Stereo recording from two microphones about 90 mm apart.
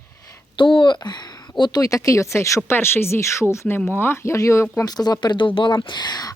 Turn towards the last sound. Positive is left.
turn(degrees=50)  # may be behind; listen again after turning